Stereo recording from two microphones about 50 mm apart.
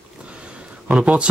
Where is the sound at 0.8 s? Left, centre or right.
Right.